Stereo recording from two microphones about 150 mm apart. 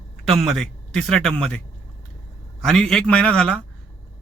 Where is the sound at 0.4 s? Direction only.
Centre (ahead or behind).